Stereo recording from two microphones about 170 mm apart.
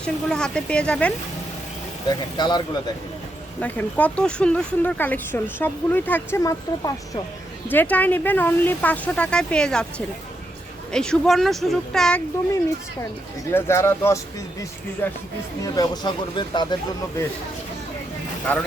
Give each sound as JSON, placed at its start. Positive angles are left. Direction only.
{"t": 0.0, "sound": "speech", "side_deg": 5}
{"t": 2.0, "sound": "speech", "side_deg": 25}
{"t": 3.6, "sound": "speech", "side_deg": 10}
{"t": 10.9, "sound": "speech", "side_deg": 5}
{"t": 13.5, "sound": "speech", "side_deg": 15}